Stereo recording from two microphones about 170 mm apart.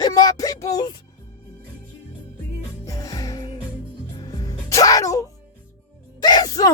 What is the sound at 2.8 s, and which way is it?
Music, 20° left (ahead or behind).